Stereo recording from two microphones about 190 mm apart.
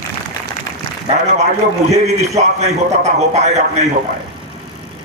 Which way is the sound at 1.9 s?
35° right (ahead or behind).